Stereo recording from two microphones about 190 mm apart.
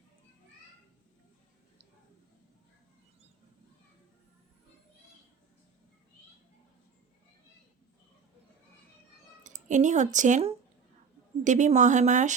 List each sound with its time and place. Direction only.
9.4 s speech: 40° right (ahead or behind)